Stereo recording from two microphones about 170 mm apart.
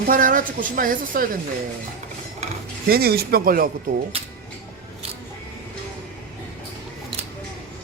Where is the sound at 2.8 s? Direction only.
65° right (ahead or behind).